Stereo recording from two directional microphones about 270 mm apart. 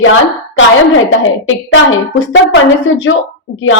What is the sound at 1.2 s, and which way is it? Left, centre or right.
A woman's voice, left.